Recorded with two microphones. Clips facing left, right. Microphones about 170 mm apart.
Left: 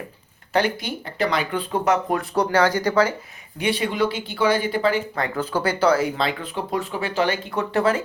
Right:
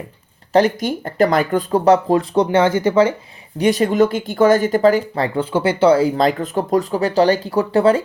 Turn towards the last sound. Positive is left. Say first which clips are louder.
# right 7 dB
turn(degrees=-30)  # may be behind; listen again after turning